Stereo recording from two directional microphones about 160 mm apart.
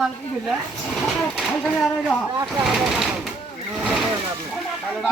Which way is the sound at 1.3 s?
5° left (ahead or behind).